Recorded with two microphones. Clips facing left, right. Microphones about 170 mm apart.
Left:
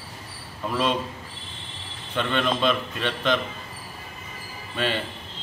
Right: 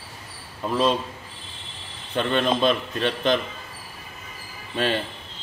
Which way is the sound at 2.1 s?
40° right (ahead or behind).